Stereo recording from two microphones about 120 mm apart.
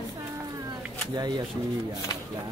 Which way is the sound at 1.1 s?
35° right (ahead or behind).